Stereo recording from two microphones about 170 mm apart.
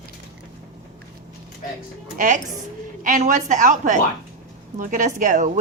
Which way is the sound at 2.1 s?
50° right (ahead or behind).